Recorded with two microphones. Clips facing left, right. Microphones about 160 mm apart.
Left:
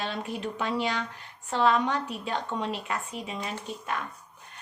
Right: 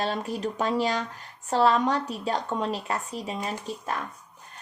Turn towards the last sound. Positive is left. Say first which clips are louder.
# right 2 dB
turn(degrees=-35)  # may be behind; listen again after turning